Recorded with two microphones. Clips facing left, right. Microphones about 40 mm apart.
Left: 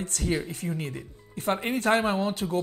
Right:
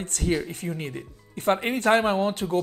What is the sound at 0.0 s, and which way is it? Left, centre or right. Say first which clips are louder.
Speech: right 2 dB; right.